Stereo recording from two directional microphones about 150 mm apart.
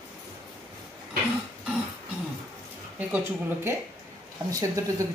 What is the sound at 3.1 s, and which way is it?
Speech, 15° right (ahead or behind).